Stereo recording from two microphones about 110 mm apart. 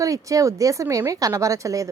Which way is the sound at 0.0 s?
30° right (ahead or behind).